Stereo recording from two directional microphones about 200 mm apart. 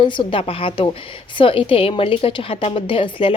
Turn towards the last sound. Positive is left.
turn(degrees=25)  # may be behind; listen again after turning